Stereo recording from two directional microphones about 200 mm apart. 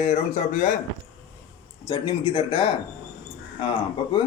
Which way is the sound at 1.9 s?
25° left (ahead or behind).